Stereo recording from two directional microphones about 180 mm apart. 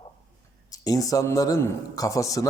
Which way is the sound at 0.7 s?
20° left (ahead or behind).